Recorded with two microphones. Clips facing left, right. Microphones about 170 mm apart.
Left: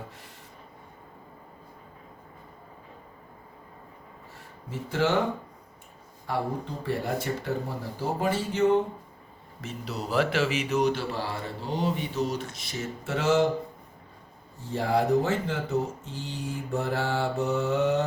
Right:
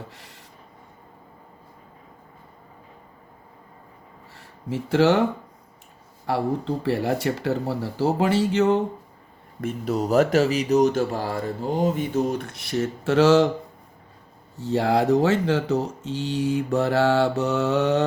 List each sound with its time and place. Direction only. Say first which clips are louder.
4.7 s speech: right 8 dB; 85° right
6.8 s speech: right 5 dB; 90° right
9.6 s a man's voice: right 10 dB; 50° right (ahead or behind); by 13.5 s 85° right
14.6 s speech: right 5 dB; 75° right (ahead or behind)